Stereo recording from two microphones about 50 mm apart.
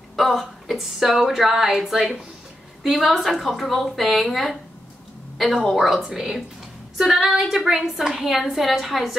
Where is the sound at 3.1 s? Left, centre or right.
Centre.